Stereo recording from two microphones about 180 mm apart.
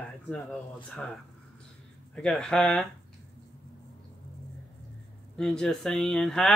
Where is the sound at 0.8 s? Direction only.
5° left (ahead or behind).